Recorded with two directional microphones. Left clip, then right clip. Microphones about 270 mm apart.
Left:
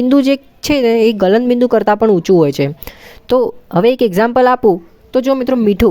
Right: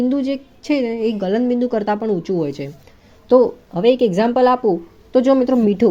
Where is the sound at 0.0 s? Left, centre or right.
Left.